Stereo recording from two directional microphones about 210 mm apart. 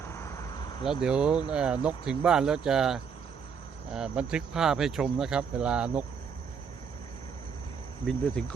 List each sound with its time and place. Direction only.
0.0 s a sound: 15° left (ahead or behind)
1.0 s speech: 5° right (ahead or behind)
8.0 s speech: 5° left (ahead or behind)